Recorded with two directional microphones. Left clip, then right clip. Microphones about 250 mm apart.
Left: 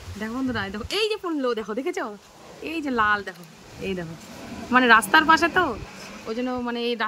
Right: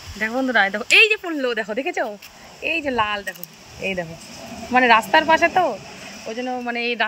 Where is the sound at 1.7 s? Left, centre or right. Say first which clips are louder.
Right 5 dB; left.